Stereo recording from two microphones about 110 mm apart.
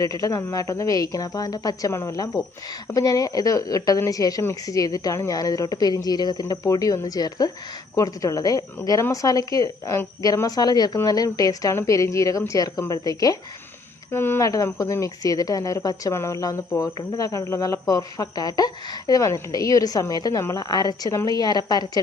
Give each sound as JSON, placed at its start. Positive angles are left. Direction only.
{"t": 0.0, "sound": "speech", "side_deg": 30}
{"t": 14.1, "sound": "speech", "side_deg": 20}